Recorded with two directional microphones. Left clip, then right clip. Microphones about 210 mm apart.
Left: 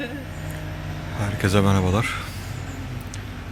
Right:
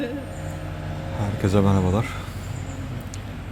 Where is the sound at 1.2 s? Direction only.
5° right (ahead or behind).